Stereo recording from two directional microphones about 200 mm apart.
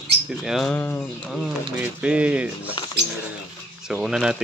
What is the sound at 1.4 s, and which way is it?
Speech, 5° right (ahead or behind).